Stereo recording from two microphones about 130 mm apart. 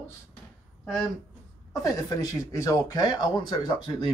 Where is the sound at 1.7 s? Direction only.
30° left (ahead or behind).